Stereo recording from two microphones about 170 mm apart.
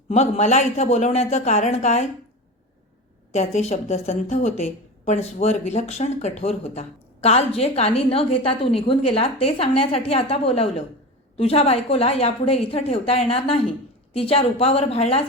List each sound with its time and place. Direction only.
0.1 s a woman's voice: 40° left (ahead or behind)
3.3 s a woman's voice: 40° left (ahead or behind)